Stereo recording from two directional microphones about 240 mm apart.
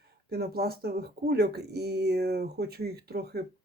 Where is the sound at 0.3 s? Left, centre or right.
Right.